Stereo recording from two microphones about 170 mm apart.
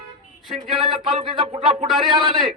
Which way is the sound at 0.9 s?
35° right (ahead or behind).